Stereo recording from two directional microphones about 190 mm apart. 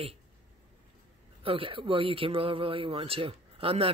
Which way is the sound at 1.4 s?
30° right (ahead or behind).